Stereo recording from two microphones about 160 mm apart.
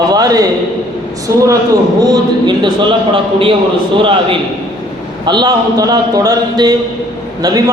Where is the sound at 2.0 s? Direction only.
25° right (ahead or behind).